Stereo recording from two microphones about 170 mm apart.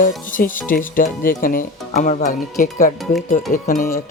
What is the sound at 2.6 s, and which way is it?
Speech, 55° left (ahead or behind).